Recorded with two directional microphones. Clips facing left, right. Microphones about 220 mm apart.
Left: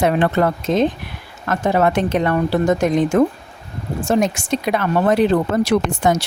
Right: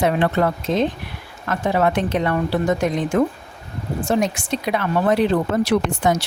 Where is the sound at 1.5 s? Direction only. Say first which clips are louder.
Left 2 dB; 45° left (ahead or behind).